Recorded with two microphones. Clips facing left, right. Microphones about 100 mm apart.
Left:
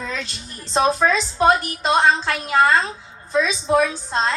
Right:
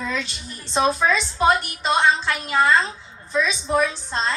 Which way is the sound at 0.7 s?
40° left (ahead or behind).